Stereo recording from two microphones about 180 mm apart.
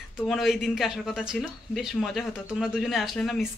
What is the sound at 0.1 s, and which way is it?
Speech, centre (ahead or behind).